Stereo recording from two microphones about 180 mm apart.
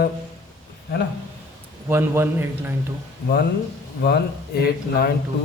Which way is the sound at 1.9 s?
15° right (ahead or behind).